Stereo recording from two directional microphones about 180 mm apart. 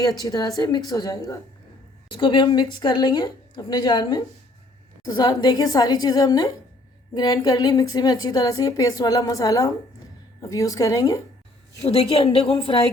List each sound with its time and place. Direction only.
0.0 s a woman's voice: 20° left (ahead or behind)
11.9 s a woman's voice: 35° left (ahead or behind)